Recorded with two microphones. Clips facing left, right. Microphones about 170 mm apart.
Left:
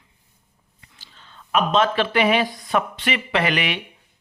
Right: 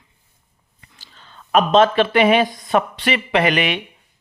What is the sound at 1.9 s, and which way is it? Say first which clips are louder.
A man's voice: right 4 dB; 20° right (ahead or behind).